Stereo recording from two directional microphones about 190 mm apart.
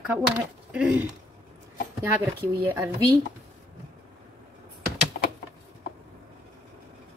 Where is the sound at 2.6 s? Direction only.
10° right (ahead or behind).